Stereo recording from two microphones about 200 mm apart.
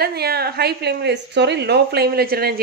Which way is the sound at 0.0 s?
50° right (ahead or behind).